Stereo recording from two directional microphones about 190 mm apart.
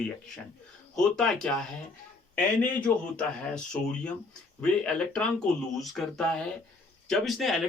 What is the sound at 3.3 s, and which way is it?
Speech, 5° left (ahead or behind).